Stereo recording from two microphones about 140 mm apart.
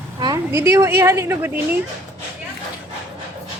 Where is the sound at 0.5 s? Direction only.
20° right (ahead or behind).